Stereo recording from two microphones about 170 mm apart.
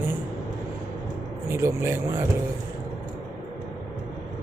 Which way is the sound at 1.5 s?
15° right (ahead or behind).